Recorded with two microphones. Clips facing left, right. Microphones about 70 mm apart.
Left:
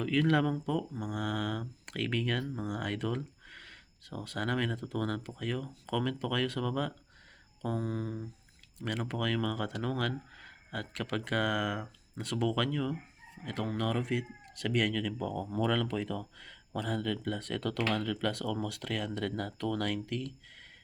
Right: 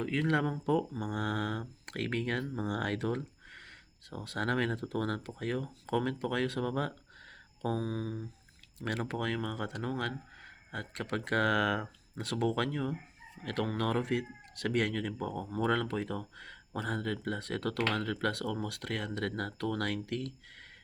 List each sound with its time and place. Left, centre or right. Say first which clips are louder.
0.0 s speech: left 3 dB; right
0.6 s speech: right 3 dB; right
4.3 s speech: right 1 dB; right
7.8 s speech: even; centre
8.8 s speech: right 1 dB; right
9.1 s speech: left 2 dB; right
10.7 s speech: left 1 dB; right
11.1 s speech: right 2 dB; right
13.4 s speech: right 1 dB; right
18.4 s speech: left 1 dB; right
18.8 s speech: left 1 dB; right
20.1 s speech: even; right